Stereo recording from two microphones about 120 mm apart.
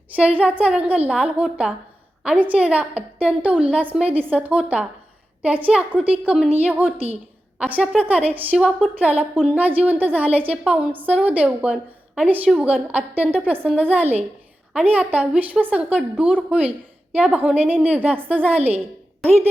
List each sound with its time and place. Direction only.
0.2 s a woman's voice: 10° right (ahead or behind)
4.0 s a woman's voice: 50° right (ahead or behind)
4.3 s a woman's voice: 10° right (ahead or behind)